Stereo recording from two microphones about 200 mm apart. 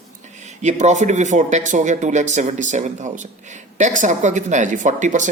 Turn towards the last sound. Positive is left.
turn(degrees=-40)  # may be behind; listen again after turning